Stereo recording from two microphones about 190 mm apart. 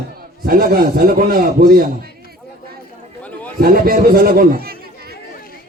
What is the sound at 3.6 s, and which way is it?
Speech, 50° right (ahead or behind).